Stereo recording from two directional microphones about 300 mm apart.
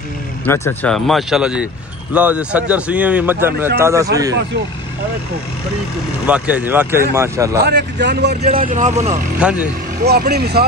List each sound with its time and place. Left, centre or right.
0.5 s speech: centre
6.2 s speech: centre
7.6 s a man's voice: right
9.1 s speech: centre
10.0 s a man's voice: right